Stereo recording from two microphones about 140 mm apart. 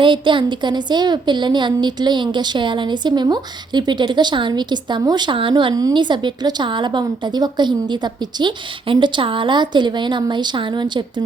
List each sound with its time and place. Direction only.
0.0 s a woman's voice: 35° right (ahead or behind)